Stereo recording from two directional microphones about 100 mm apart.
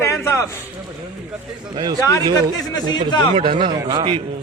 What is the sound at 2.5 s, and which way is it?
Speech, 45° left (ahead or behind).